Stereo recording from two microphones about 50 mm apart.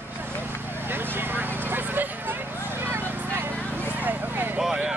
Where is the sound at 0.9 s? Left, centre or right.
Right.